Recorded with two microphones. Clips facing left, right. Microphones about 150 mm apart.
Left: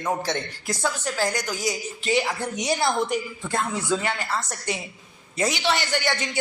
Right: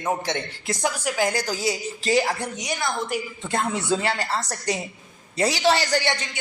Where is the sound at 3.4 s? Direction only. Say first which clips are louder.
Right 1 dB; 20° right (ahead or behind).